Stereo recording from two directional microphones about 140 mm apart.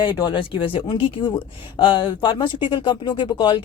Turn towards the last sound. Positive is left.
turn(degrees=35)  # may be behind; listen again after turning